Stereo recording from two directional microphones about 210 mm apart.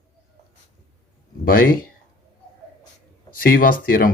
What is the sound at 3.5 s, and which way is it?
Speech, 45° left (ahead or behind).